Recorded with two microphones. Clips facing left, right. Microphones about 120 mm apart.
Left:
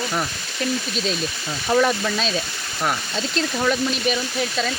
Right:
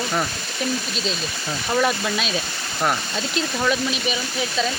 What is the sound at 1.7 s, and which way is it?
Speech, 5° right (ahead or behind).